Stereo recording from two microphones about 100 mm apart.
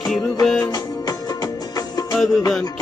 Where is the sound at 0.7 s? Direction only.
40° left (ahead or behind).